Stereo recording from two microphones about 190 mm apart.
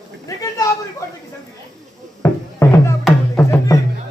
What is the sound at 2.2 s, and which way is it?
Music, 15° left (ahead or behind).